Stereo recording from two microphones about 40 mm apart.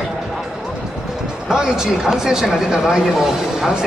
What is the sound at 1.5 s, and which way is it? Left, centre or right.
Speech, centre.